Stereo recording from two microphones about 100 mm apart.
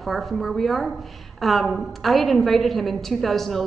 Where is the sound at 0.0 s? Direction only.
Centre (ahead or behind).